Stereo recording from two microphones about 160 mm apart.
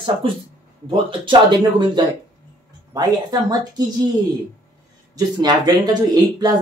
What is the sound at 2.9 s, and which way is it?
Speech, 25° right (ahead or behind).